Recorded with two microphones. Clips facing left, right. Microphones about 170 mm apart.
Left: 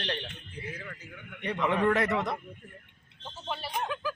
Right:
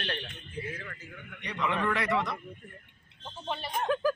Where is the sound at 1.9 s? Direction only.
45° left (ahead or behind).